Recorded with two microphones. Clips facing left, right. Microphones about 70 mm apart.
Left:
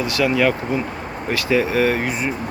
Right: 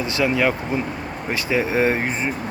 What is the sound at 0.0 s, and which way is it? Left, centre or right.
Speech, right.